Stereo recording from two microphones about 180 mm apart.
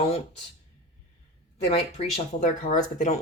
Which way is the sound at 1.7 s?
35° left (ahead or behind).